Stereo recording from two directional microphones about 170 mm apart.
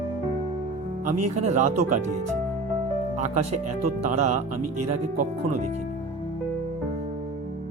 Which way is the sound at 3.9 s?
45° right (ahead or behind).